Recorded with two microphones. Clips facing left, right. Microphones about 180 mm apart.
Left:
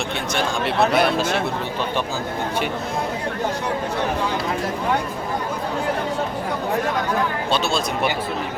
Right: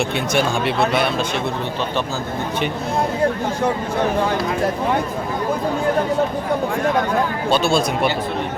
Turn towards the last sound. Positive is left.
turn(degrees=-55)  # may be behind; listen again after turning